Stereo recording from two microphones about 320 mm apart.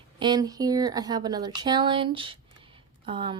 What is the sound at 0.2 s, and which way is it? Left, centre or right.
Speech, centre.